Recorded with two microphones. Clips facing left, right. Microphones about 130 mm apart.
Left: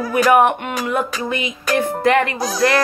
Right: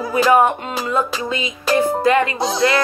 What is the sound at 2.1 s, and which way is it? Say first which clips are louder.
Speech: left 2 dB; 65° left (ahead or behind).